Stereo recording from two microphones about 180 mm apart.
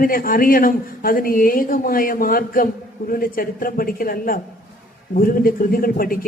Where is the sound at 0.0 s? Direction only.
50° left (ahead or behind).